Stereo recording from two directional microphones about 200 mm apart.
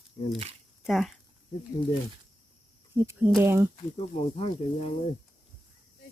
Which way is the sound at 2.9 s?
10° right (ahead or behind).